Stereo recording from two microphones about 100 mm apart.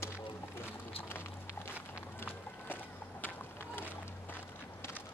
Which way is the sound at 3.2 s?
20° left (ahead or behind).